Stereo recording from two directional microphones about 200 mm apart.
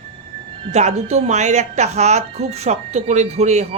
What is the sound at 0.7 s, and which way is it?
Speech, 35° right (ahead or behind).